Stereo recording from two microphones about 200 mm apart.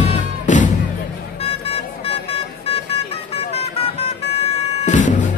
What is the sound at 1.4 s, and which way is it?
Music, 30° left (ahead or behind).